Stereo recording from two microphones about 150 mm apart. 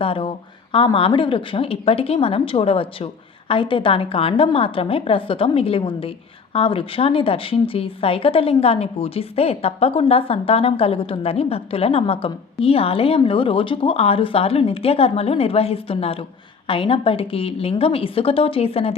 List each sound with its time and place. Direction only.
0.0 s a woman's voice: 35° left (ahead or behind)